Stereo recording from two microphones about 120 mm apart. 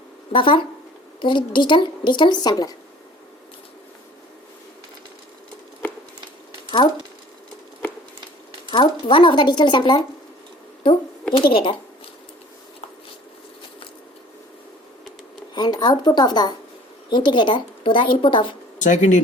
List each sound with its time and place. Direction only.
0.3 s a woman's voice: 45° left (ahead or behind)
8.7 s a woman's voice: 40° left (ahead or behind)
11.3 s a woman's voice: 45° left (ahead or behind)
15.5 s a woman's voice: 35° left (ahead or behind)
18.8 s speech: 90° left